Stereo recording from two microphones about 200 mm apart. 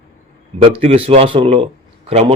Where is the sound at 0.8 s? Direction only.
30° right (ahead or behind).